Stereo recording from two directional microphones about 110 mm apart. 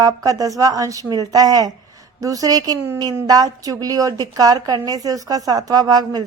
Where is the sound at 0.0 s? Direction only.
30° right (ahead or behind).